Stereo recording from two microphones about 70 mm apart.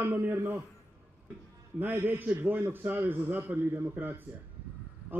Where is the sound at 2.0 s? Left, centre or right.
Right.